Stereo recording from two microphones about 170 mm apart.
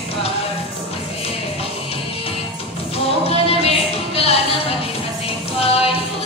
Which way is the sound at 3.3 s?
35° left (ahead or behind).